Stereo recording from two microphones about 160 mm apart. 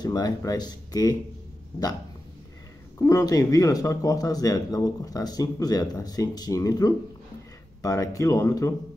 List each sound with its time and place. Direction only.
0.0 s speech: 25° left (ahead or behind)
3.0 s speech: 20° left (ahead or behind)